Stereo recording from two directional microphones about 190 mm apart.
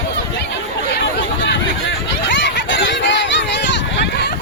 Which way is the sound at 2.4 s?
70° left (ahead or behind).